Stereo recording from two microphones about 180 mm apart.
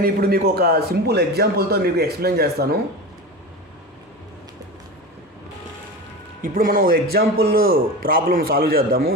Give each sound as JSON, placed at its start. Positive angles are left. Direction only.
{"t": 0.0, "sound": "a man's voice", "side_deg": -60}
{"t": 6.4, "sound": "a man's voice", "side_deg": -50}